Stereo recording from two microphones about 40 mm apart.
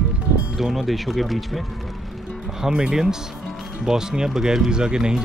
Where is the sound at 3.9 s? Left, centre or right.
Centre.